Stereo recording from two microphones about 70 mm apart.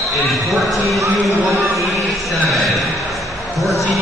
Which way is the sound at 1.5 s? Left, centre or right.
Right.